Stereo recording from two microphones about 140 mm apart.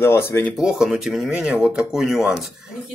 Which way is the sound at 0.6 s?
5° right (ahead or behind).